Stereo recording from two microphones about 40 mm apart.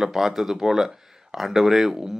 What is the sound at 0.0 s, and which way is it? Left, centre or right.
Speech, centre.